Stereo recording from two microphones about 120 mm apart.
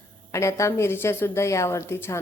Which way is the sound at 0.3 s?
25° left (ahead or behind).